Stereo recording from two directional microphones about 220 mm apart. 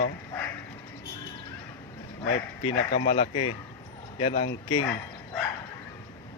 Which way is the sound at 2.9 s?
30° left (ahead or behind).